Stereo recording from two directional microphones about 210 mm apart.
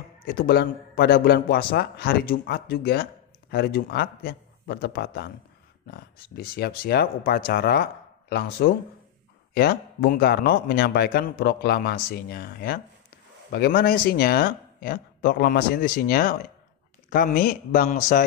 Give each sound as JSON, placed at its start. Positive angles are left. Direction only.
{"t": 0.2, "sound": "a man's voice", "side_deg": 45}